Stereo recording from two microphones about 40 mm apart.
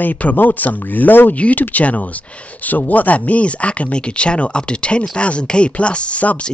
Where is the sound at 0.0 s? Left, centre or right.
Left.